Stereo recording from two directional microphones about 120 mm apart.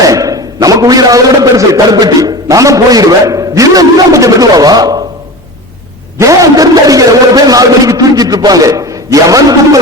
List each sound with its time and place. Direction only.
0.0 s a man's voice: 30° right (ahead or behind)
6.1 s a man's voice: 25° right (ahead or behind)